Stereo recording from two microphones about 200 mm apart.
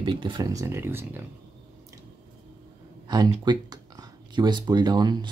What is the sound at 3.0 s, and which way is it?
Speech, 20° right (ahead or behind).